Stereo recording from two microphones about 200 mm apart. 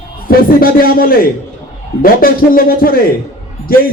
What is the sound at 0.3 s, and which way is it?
Speech, 45° left (ahead or behind).